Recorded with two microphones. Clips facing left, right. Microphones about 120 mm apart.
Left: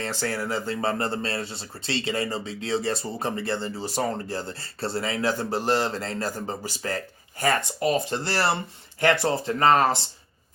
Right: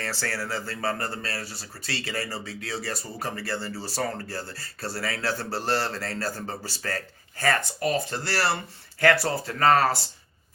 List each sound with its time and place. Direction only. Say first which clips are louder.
0.0 s speech: left 3 dB; 20° left (ahead or behind)